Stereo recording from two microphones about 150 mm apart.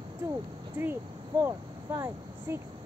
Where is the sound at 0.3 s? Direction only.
15° right (ahead or behind).